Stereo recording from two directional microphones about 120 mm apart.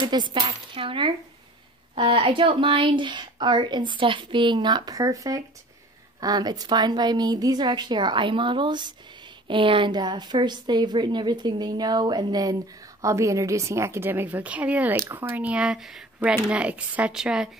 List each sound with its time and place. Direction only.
0.0 s cutlery: 40° right (ahead or behind)
2.0 s a woman's voice: 45° right (ahead or behind); by 17.5 s 5° right (ahead or behind)